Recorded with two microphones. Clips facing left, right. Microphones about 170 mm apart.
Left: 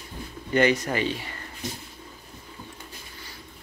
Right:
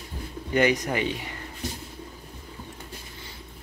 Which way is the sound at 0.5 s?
15° right (ahead or behind).